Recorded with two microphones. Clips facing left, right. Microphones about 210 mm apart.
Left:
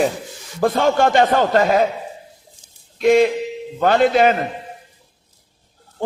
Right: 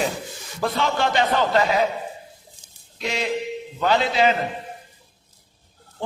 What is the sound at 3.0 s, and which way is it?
A man's voice, 50° left (ahead or behind).